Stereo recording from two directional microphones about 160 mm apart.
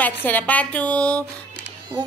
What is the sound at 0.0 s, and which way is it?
A woman's voice, 10° left (ahead or behind).